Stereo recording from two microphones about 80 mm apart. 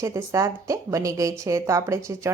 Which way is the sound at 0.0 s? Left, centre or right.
Right.